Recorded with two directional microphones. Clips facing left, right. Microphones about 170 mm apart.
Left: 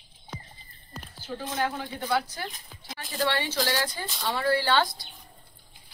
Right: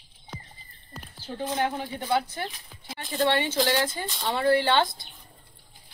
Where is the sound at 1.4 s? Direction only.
20° right (ahead or behind).